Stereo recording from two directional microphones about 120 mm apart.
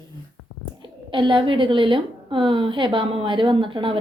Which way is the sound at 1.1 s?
45° right (ahead or behind).